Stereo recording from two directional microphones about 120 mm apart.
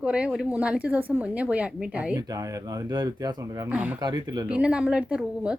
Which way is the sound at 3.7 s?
10° right (ahead or behind).